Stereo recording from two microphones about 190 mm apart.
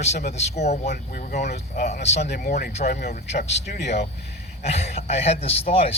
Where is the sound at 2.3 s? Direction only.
50° left (ahead or behind).